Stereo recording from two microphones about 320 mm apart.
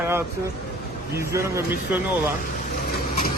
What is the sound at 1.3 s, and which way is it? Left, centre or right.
Speech, centre.